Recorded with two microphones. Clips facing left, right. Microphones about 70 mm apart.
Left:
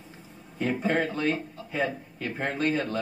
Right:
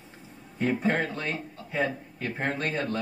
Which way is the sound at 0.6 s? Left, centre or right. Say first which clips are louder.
Even; right.